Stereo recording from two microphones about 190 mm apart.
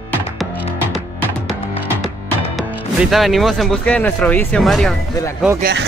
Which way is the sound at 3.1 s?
Centre (ahead or behind).